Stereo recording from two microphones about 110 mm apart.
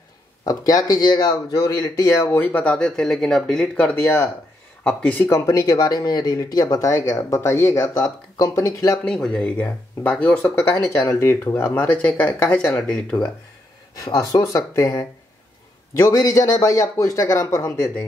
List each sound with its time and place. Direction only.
0.5 s speech: 35° left (ahead or behind)
9.0 s speech: 10° left (ahead or behind)
10.9 s speech: 25° left (ahead or behind); by 13.3 s 10° left (ahead or behind)
13.9 s speech: 30° left (ahead or behind)